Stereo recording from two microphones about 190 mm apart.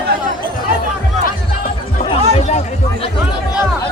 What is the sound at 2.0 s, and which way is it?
Speech, 35° left (ahead or behind).